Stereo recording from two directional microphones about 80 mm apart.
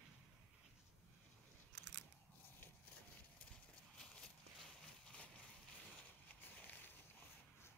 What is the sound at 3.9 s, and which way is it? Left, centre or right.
Walk, centre.